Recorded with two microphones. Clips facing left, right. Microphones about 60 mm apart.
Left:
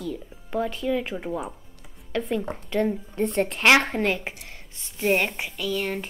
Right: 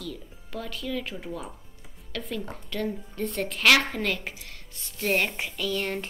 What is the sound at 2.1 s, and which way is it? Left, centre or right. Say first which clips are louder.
Speech: left 7 dB; left.